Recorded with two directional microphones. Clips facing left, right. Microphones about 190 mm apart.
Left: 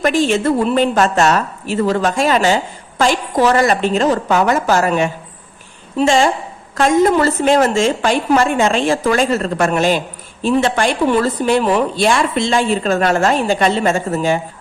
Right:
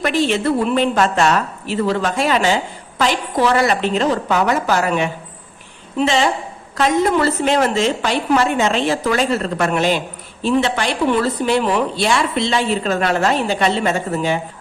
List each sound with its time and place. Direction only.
0.0 s a woman's voice: 45° left (ahead or behind)